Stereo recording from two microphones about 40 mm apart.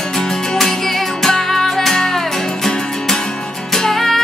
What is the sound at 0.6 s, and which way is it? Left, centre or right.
Music, centre.